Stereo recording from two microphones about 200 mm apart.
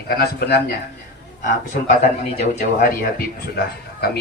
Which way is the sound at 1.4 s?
40° left (ahead or behind).